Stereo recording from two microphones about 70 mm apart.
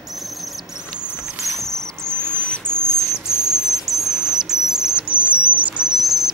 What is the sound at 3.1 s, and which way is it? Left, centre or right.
Cricket, left.